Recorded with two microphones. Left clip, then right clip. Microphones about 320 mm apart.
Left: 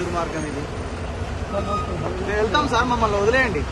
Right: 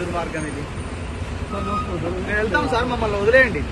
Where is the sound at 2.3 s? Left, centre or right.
Centre.